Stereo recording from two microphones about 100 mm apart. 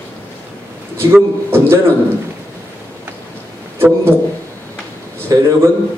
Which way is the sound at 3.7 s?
25° right (ahead or behind).